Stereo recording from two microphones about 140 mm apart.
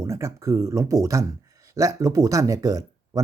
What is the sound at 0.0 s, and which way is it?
Speech, 20° right (ahead or behind).